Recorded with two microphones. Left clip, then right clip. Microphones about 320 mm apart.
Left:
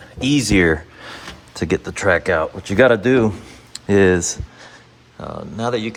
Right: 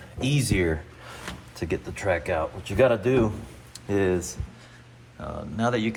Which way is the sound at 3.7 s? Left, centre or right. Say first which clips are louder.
Left 10 dB; left.